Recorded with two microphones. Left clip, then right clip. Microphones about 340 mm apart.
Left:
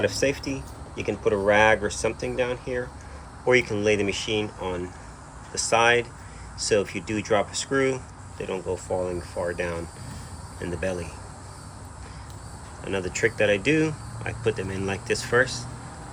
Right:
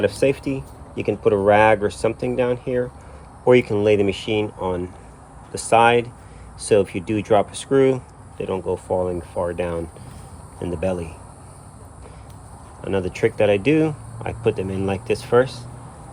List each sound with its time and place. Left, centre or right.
1.0 s speech: right
12.8 s speech: centre